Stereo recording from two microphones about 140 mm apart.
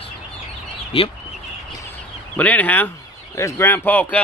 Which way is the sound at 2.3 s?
10° left (ahead or behind).